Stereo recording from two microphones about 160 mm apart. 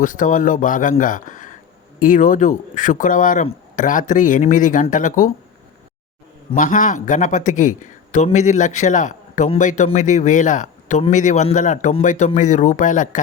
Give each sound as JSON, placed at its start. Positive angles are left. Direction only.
{"t": 0.0, "sound": "speech", "side_deg": 55}
{"t": 6.6, "sound": "speech", "side_deg": 55}